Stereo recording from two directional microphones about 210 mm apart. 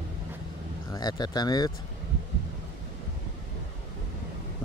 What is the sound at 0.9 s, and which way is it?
Speech, 20° left (ahead or behind).